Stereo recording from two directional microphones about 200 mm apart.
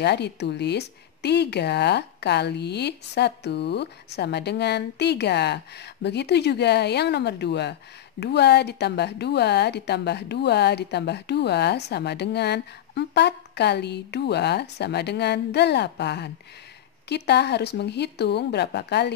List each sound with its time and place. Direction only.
0.0 s a woman's voice: 55° left (ahead or behind)